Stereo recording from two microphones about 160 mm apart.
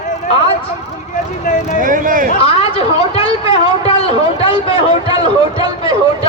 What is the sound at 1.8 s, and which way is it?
Speech, 55° right (ahead or behind).